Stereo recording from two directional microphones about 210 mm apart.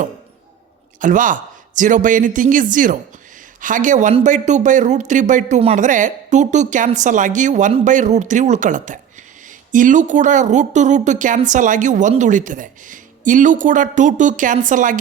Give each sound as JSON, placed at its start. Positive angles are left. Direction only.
{"t": 0.9, "sound": "speech", "side_deg": -40}